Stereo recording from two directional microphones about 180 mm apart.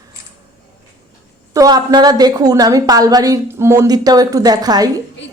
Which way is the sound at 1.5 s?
20° right (ahead or behind).